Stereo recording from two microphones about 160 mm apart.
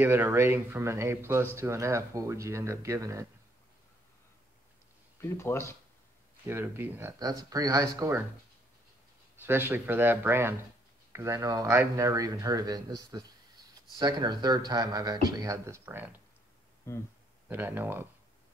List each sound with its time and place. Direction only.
0.0 s speech: 15° right (ahead or behind)
5.2 s speech: 15° left (ahead or behind)
6.4 s speech: 15° right (ahead or behind)
9.4 s speech: 15° right (ahead or behind)
16.9 s speech: 15° left (ahead or behind)
17.5 s speech: 10° right (ahead or behind)